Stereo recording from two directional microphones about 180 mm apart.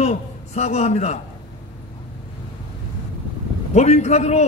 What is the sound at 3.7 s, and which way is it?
Speech, 40° left (ahead or behind).